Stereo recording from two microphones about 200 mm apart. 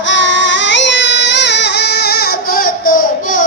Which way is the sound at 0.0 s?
65° left (ahead or behind).